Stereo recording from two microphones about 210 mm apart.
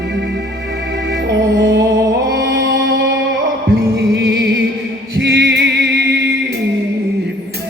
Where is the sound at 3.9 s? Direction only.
55° right (ahead or behind).